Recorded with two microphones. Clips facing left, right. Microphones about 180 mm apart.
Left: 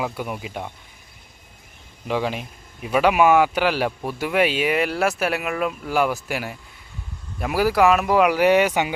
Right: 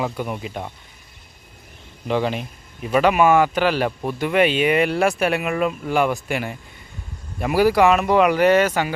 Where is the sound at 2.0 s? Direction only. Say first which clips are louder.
Right 2 dB; 5° left (ahead or behind).